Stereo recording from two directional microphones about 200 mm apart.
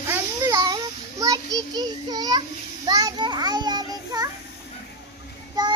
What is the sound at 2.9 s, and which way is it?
A child's voice, 20° right (ahead or behind).